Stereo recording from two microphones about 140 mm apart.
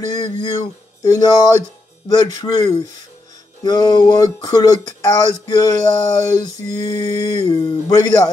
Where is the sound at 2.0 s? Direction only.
25° left (ahead or behind).